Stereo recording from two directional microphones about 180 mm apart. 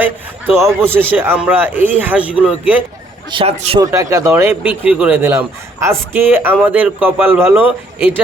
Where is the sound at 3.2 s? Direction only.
30° right (ahead or behind).